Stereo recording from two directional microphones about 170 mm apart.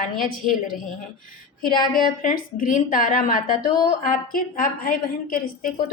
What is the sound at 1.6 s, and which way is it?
A woman's voice, 55° left (ahead or behind).